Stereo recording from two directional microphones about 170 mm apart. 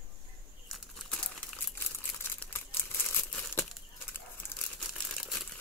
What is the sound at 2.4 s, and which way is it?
Crumpling, 10° left (ahead or behind).